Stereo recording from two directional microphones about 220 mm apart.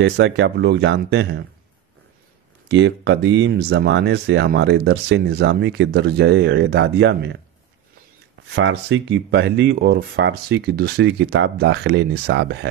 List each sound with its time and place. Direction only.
0.0 s speech: 55° right (ahead or behind)
2.7 s speech: 50° right (ahead or behind)
8.5 s speech: 50° right (ahead or behind)